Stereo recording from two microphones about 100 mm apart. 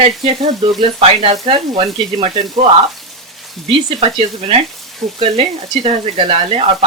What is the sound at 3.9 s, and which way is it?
Speech, 75° right (ahead or behind).